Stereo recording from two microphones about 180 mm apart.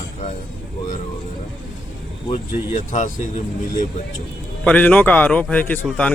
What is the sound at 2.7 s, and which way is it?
Speech, 45° left (ahead or behind).